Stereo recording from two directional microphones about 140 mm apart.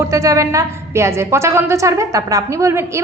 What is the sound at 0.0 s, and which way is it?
A woman's voice, 25° right (ahead or behind).